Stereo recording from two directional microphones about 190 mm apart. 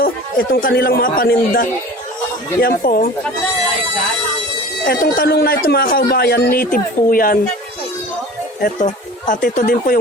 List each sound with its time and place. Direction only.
0.0 s speech: 50° left (ahead or behind)
4.9 s speech: 55° left (ahead or behind)
8.6 s speech: 45° left (ahead or behind)